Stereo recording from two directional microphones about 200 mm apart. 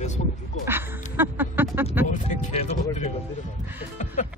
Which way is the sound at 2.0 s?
40° left (ahead or behind).